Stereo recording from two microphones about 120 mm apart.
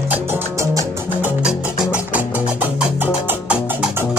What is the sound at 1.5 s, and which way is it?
Music, 10° right (ahead or behind).